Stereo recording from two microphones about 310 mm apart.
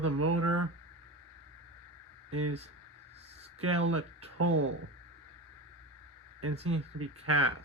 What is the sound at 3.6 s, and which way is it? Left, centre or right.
Speech, right.